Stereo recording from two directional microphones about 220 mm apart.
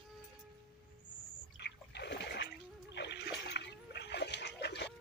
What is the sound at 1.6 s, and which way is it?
Splash, 50° left (ahead or behind).